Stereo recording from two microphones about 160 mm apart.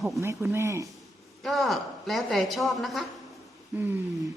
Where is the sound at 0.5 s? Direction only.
15° right (ahead or behind).